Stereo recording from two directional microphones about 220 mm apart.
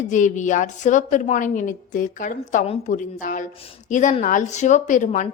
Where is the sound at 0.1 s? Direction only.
35° left (ahead or behind).